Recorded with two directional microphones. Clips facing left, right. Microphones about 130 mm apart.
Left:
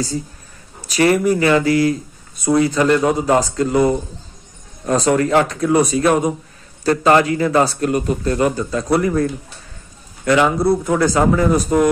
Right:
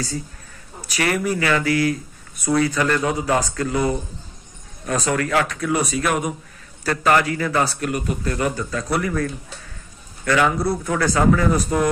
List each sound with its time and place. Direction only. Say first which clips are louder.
0.8 s a man's voice: left 7 dB; 25° left (ahead or behind)